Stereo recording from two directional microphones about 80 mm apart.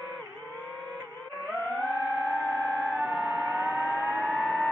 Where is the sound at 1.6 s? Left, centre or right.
Centre.